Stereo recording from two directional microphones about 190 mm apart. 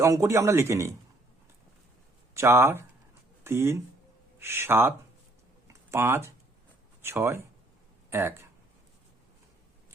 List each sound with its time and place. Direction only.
0.0 s speech: 15° right (ahead or behind)
2.3 s speech: 15° right (ahead or behind)